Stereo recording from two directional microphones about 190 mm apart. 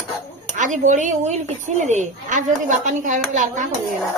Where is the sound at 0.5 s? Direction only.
40° right (ahead or behind).